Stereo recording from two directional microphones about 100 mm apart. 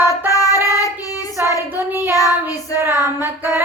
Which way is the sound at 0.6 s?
35° left (ahead or behind).